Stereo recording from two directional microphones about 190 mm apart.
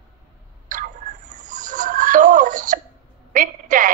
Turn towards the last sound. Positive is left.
turn(degrees=-45)  # may be behind; listen again after turning